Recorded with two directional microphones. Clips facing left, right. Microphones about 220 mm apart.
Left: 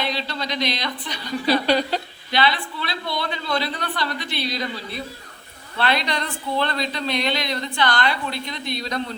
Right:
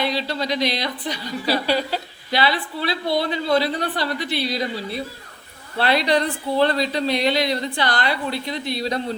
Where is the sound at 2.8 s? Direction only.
35° right (ahead or behind).